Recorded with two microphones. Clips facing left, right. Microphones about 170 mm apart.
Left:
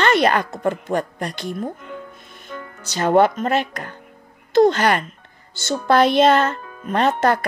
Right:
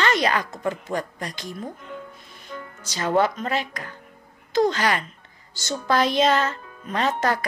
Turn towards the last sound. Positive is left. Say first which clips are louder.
# left 5 dB
turn(degrees=55)  # may be behind; listen again after turning